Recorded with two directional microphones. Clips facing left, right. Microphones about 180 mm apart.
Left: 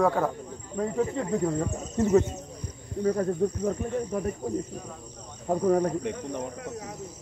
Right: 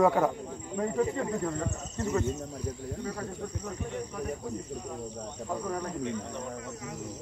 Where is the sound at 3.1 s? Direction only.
55° left (ahead or behind).